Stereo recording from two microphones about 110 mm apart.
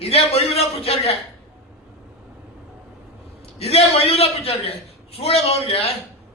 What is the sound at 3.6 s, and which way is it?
A man's voice, 70° left (ahead or behind).